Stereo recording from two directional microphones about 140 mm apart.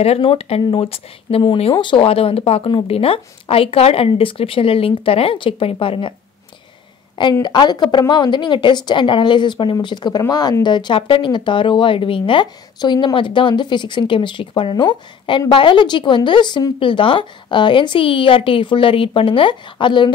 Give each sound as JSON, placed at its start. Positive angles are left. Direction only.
{"t": 0.0, "sound": "speech", "side_deg": 45}
{"t": 7.4, "sound": "speech", "side_deg": 30}